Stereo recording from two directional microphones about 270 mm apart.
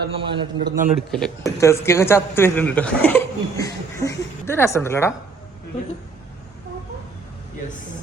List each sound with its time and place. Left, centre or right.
0.1 s a man's voice: centre
0.9 s a woman's voice: centre